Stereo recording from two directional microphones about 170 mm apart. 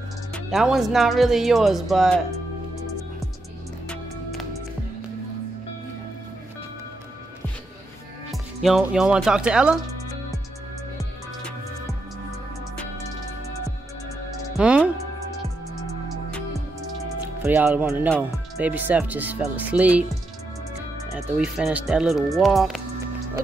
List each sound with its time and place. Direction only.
0.3 s speech: centre (ahead or behind)
3.9 s music: centre (ahead or behind)
8.3 s speech: centre (ahead or behind)
14.6 s speech: 5° right (ahead or behind)
17.4 s speech: 15° right (ahead or behind)
21.1 s speech: 5° right (ahead or behind)